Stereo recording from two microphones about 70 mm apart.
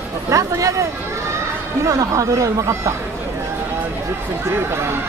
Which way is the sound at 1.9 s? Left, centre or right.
Right.